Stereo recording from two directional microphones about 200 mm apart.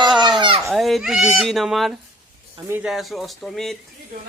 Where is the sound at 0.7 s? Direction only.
Centre (ahead or behind).